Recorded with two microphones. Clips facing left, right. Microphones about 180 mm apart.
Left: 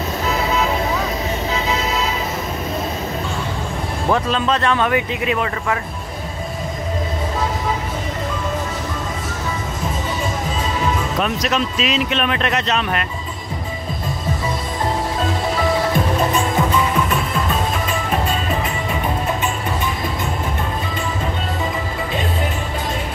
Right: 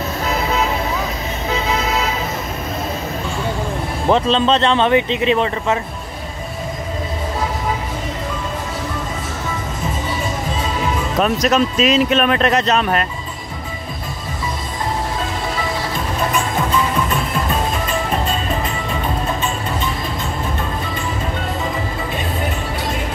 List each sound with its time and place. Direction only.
4.1 s speech: 25° right (ahead or behind)
11.1 s speech: 40° right (ahead or behind)